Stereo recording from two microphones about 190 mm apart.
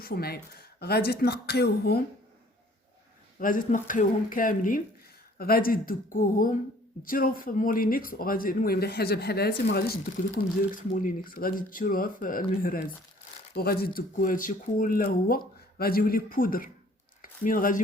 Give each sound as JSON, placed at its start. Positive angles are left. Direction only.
{"t": 0.0, "sound": "speech", "side_deg": 55}
{"t": 3.3, "sound": "speech", "side_deg": 45}
{"t": 13.5, "sound": "speech", "side_deg": 55}